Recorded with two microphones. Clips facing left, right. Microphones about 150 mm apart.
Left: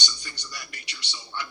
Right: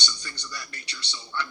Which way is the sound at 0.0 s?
15° left (ahead or behind).